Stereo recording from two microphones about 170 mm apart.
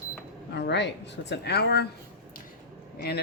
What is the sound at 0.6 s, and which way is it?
A woman's voice, 90° left.